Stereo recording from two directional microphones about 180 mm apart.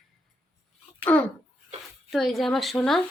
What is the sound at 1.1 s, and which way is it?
A woman's voice, 10° left (ahead or behind).